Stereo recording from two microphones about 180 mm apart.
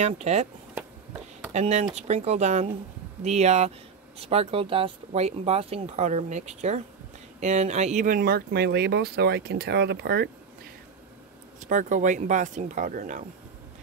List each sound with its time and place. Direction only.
0.0 s speech: 35° right (ahead or behind)
1.5 s speech: 40° right (ahead or behind); by 10.3 s 65° right (ahead or behind)
11.6 s speech: 45° right (ahead or behind)